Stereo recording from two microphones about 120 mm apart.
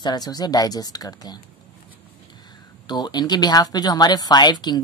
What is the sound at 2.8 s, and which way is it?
Speech, 35° left (ahead or behind).